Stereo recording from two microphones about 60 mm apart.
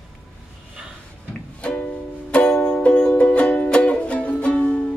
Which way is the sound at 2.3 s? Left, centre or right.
Centre.